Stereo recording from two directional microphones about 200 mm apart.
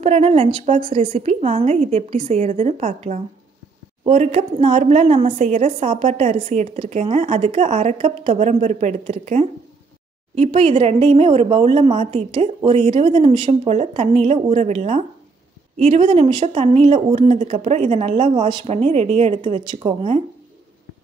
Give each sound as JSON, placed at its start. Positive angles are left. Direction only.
{"t": 0.0, "sound": "speech", "side_deg": -30}